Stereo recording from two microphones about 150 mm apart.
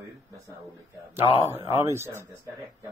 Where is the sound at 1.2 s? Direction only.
40° left (ahead or behind).